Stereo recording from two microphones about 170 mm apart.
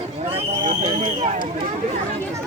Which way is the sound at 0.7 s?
40° right (ahead or behind).